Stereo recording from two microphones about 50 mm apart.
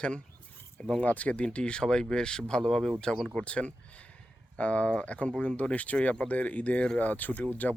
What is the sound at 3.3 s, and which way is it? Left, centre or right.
Speech, left.